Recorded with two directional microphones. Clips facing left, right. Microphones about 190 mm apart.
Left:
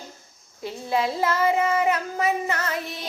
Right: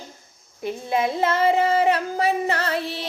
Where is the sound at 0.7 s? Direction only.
20° right (ahead or behind).